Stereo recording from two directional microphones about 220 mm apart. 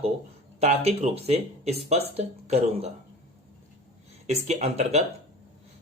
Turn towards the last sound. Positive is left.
turn(degrees=-30)  # may be behind; listen again after turning